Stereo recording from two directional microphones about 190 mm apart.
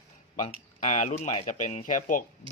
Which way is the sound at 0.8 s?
40° left (ahead or behind).